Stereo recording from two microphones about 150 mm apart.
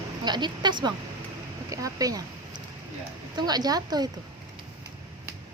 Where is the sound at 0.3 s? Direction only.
30° right (ahead or behind).